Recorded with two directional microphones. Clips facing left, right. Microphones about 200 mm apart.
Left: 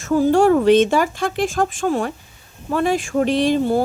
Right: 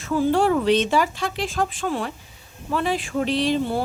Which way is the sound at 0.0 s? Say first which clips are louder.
Left 5 dB; 45° left (ahead or behind).